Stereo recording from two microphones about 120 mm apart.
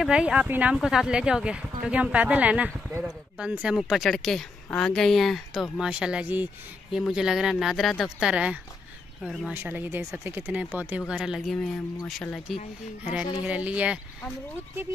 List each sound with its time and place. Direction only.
0.0 s speech: 5° right (ahead or behind)
9.5 s speech: 20° right (ahead or behind); by 12.5 s centre (ahead or behind)
13.4 s speech: 10° right (ahead or behind)